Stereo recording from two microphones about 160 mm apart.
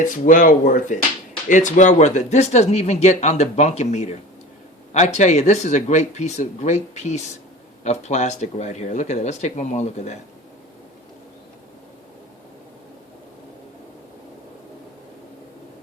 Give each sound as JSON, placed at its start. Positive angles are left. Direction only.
{"t": 0.0, "sound": "speech", "side_deg": 55}